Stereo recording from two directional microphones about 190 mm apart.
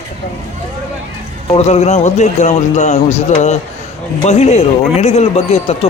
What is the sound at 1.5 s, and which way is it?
Speech, 35° left (ahead or behind).